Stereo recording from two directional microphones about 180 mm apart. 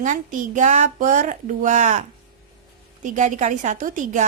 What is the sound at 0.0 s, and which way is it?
Speech, 45° right (ahead or behind).